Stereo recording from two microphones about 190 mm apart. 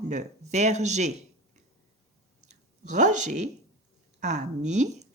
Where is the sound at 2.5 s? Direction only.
40° right (ahead or behind).